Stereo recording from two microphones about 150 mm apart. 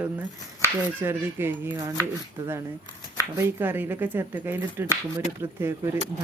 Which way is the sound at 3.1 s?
20° right (ahead or behind).